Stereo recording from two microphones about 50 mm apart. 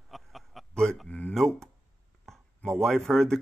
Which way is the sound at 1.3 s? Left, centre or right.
Centre.